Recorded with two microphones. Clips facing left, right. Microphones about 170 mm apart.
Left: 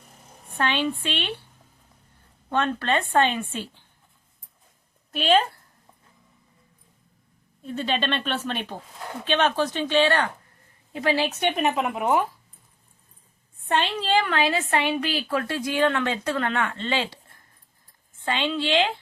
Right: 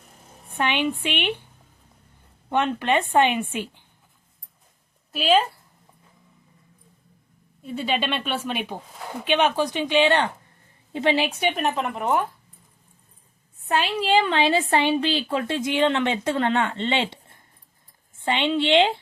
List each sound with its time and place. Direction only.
0.0 s a sound: centre (ahead or behind)
0.6 s speech: 15° right (ahead or behind)
2.5 s speech: 15° right (ahead or behind)
5.1 s a woman's voice: 5° right (ahead or behind)
7.6 s a woman's voice: 10° right (ahead or behind)
13.7 s speech: 5° right (ahead or behind)
14.3 s a woman's voice: 25° right (ahead or behind)